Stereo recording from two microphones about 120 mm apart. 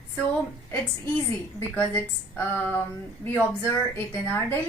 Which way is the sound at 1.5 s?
15° left (ahead or behind).